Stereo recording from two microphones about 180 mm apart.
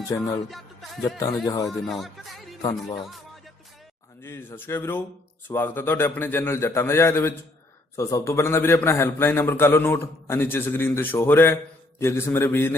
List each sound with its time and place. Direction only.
0.1 s a man's voice: 15° left (ahead or behind)
0.4 s music: centre (ahead or behind)
1.5 s speech: 20° left (ahead or behind)
1.9 s speech: centre (ahead or behind)
4.2 s a man's voice: 15° left (ahead or behind)